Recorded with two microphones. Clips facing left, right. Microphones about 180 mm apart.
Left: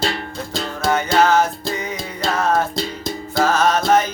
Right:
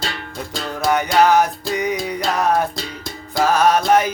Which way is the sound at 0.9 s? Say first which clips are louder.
Right 1 dB; 15° right (ahead or behind).